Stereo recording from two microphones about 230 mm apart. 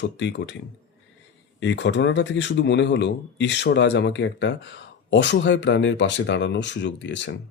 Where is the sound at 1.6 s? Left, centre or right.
Left.